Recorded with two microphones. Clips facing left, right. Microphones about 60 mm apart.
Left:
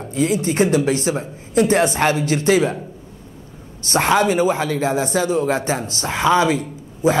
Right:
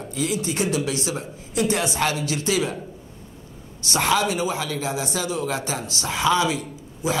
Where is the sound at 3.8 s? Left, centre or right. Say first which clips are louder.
Left 5 dB; left.